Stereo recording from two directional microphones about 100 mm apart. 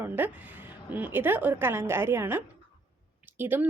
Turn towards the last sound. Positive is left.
turn(degrees=-20)  # may be behind; listen again after turning